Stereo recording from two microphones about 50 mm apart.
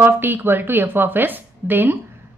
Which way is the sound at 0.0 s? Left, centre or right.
Right.